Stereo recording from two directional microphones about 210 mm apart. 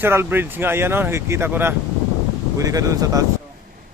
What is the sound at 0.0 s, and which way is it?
Speech, 10° right (ahead or behind).